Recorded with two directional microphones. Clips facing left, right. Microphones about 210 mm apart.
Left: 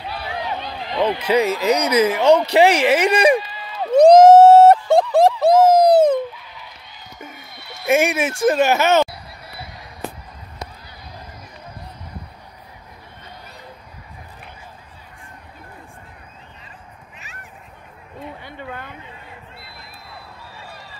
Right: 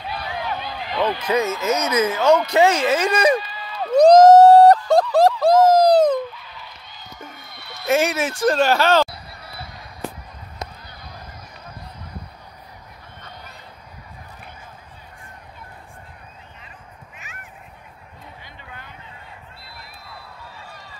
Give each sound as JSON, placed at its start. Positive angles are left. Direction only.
{"t": 0.4, "sound": "run", "side_deg": 20}
{"t": 1.0, "sound": "speech", "side_deg": 10}
{"t": 2.2, "sound": "speech", "side_deg": 30}
{"t": 3.1, "sound": "speech", "side_deg": 15}
{"t": 3.3, "sound": "run", "side_deg": 20}
{"t": 4.8, "sound": "a sound", "side_deg": 25}
{"t": 7.2, "sound": "sheep", "side_deg": 10}
{"t": 8.1, "sound": "speech", "side_deg": 10}
{"t": 8.7, "sound": "speech", "side_deg": 20}
{"t": 18.2, "sound": "a sound", "side_deg": 60}